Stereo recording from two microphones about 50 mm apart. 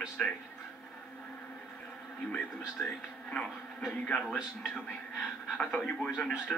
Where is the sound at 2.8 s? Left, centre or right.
Left.